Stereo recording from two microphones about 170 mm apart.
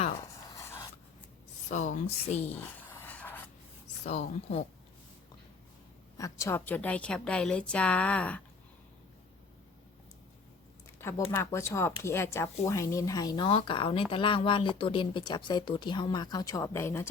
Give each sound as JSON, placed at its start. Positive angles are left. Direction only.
{"t": 0.4, "sound": "a sound", "side_deg": 15}
{"t": 1.7, "sound": "a woman's voice", "side_deg": 45}
{"t": 2.4, "sound": "a sound", "side_deg": 10}
{"t": 4.0, "sound": "a woman's voice", "side_deg": 45}
{"t": 6.1, "sound": "a woman's voice", "side_deg": 20}
{"t": 11.3, "sound": "speech", "side_deg": 15}